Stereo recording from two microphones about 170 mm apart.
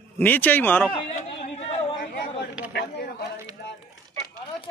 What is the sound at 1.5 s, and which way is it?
Chatter, 35° left (ahead or behind).